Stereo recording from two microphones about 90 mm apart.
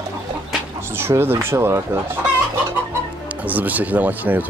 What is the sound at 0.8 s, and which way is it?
Speech, 25° right (ahead or behind).